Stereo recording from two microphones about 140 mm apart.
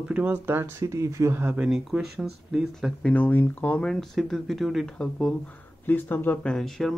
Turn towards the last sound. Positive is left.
turn(degrees=0)  # may be behind; listen again after turning